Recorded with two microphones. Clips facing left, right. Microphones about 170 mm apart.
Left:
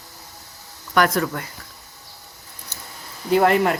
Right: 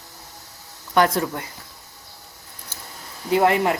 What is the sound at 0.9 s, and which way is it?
Speech, 25° right (ahead or behind).